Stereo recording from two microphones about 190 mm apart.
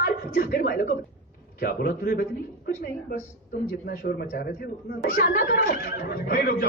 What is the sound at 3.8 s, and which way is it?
Speech, 55° left (ahead or behind).